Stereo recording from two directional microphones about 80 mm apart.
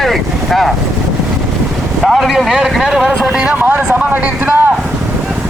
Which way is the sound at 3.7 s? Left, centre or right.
Right.